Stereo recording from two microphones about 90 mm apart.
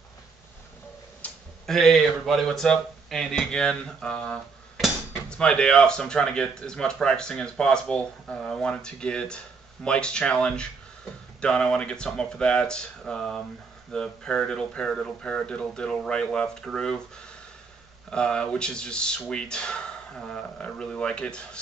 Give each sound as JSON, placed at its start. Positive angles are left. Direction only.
{"t": 1.2, "sound": "tick-tock", "side_deg": 15}
{"t": 1.7, "sound": "speech", "side_deg": 0}
{"t": 5.4, "sound": "speech", "side_deg": 10}
{"t": 18.1, "sound": "speech", "side_deg": 10}